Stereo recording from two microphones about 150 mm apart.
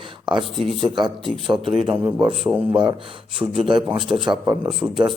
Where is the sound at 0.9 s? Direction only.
30° right (ahead or behind).